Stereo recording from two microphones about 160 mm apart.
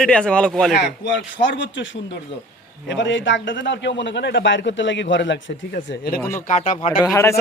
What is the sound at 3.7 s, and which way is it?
A man's voice, 90° left.